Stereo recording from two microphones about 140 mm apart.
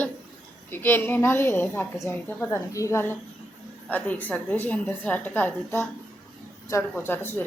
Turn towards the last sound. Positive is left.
turn(degrees=15)  # may be behind; listen again after turning